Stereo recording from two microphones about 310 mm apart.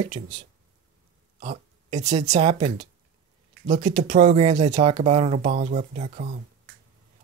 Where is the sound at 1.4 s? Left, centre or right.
Right.